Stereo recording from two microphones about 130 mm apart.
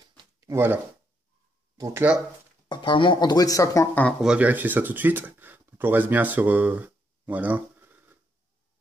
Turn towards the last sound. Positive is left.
turn(degrees=-10)  # may be behind; listen again after turning